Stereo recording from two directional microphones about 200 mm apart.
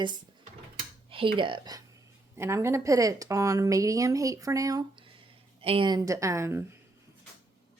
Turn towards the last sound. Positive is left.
turn(degrees=-15)  # may be behind; listen again after turning